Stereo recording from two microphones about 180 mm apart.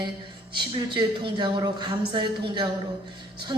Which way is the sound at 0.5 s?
25° right (ahead or behind).